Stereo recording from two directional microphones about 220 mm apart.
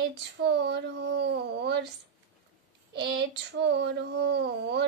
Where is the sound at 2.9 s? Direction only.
50° right (ahead or behind).